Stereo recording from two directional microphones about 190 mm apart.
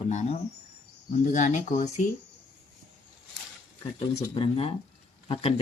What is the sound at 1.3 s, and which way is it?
Speech, 40° left (ahead or behind).